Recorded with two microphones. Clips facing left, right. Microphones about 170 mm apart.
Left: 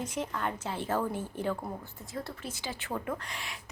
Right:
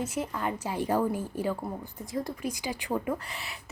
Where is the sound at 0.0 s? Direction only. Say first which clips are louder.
Right 2 dB; 10° right (ahead or behind).